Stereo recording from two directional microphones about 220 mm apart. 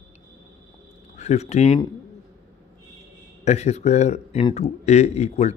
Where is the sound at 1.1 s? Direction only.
30° left (ahead or behind).